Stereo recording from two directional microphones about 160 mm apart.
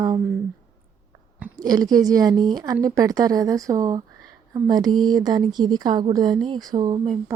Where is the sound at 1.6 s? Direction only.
25° right (ahead or behind).